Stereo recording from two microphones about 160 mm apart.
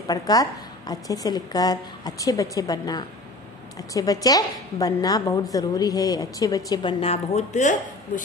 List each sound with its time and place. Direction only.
0.0 s a woman's voice: 25° left (ahead or behind); by 7.7 s 45° left (ahead or behind)